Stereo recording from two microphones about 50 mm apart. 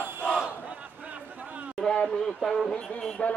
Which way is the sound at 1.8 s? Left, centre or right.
Centre.